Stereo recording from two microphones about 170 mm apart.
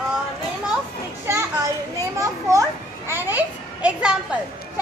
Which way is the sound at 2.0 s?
20° right (ahead or behind).